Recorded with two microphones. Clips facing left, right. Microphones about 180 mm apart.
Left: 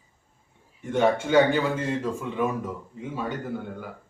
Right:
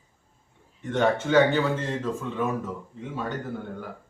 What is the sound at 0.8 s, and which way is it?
A woman's voice, 10° left (ahead or behind).